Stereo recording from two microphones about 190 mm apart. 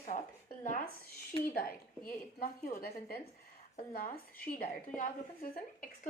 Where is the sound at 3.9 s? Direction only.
50° left (ahead or behind).